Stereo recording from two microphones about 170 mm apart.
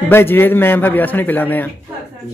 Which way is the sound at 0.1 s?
15° left (ahead or behind).